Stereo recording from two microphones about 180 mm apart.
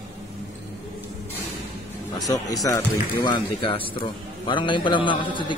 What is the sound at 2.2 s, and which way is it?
Speech, 20° left (ahead or behind).